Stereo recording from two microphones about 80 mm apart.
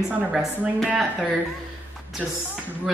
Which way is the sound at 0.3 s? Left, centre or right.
Centre.